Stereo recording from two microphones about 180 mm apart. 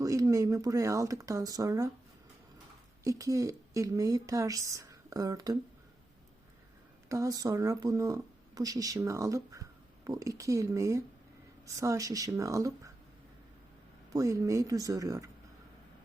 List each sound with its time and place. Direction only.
0.0 s a woman's voice: 20° right (ahead or behind)
3.0 s a woman's voice: 20° right (ahead or behind)
7.1 s a woman's voice: 20° right (ahead or behind)
14.1 s a woman's voice: 20° right (ahead or behind)